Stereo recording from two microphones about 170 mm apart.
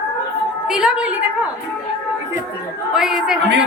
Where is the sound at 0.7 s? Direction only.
5° right (ahead or behind).